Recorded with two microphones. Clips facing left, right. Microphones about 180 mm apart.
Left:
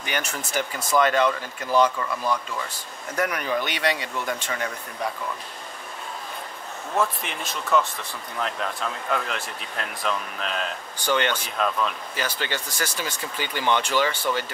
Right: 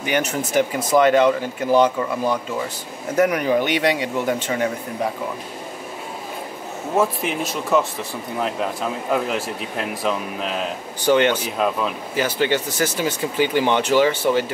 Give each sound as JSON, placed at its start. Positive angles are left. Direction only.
{"t": 0.0, "sound": "speech", "side_deg": -10}
{"t": 1.1, "sound": "speech", "side_deg": -25}
{"t": 3.2, "sound": "speech", "side_deg": -15}
{"t": 4.3, "sound": "speech", "side_deg": -25}
{"t": 7.0, "sound": "speech", "side_deg": 0}